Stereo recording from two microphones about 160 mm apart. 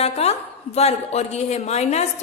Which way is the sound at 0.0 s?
40° left (ahead or behind).